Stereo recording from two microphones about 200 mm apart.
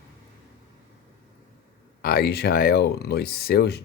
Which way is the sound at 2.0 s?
50° left (ahead or behind).